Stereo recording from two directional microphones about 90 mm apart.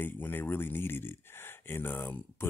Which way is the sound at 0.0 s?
20° left (ahead or behind).